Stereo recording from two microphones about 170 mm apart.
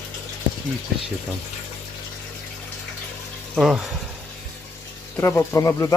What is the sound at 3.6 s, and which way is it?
Speech, centre (ahead or behind).